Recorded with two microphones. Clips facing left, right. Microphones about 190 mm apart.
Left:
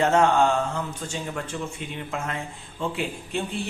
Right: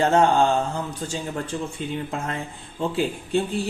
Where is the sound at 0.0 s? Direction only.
30° right (ahead or behind).